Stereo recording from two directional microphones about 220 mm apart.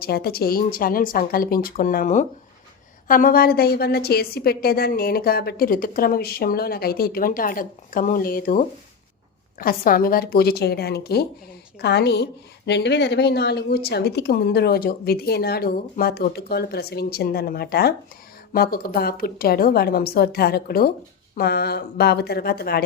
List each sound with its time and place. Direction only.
0.0 s speech: 45° left (ahead or behind)